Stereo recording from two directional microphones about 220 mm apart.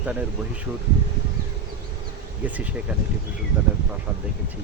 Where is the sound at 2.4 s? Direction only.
5° right (ahead or behind).